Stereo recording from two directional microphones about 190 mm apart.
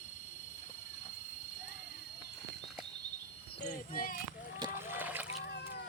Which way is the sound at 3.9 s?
45° left (ahead or behind).